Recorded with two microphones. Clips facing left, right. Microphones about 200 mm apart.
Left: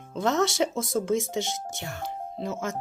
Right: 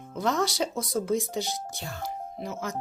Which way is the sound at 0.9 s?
25° left (ahead or behind).